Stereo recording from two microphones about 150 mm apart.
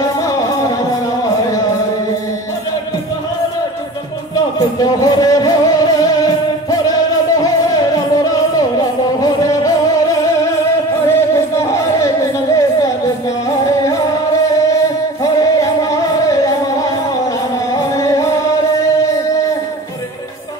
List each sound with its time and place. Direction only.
4.7 s speech: 25° left (ahead or behind)
5.9 s music: 25° left (ahead or behind)
11.1 s music: 20° left (ahead or behind)
15.2 s music: 20° left (ahead or behind)
17.7 s music: 20° left (ahead or behind)